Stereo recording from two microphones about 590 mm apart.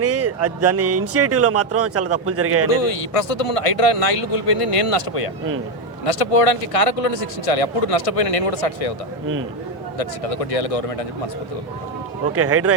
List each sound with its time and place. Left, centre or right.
0.0 s speech: right
2.6 s speech: left
10.0 s speech: left
12.3 s speech: right